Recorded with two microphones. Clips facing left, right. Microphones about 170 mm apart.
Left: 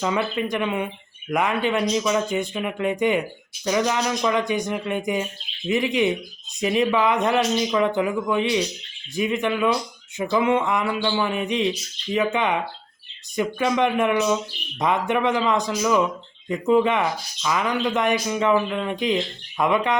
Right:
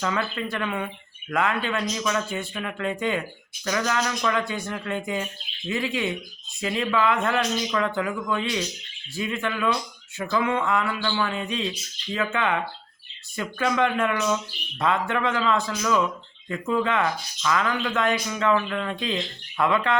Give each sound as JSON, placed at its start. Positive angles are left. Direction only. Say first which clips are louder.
{"t": 0.0, "sound": "speech", "louder": "left 4 dB", "side_deg": 15}